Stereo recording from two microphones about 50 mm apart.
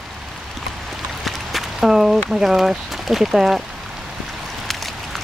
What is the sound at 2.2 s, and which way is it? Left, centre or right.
Speech, centre.